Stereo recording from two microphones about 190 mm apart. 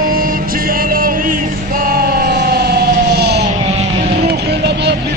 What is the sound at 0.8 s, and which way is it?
Music, 50° right (ahead or behind).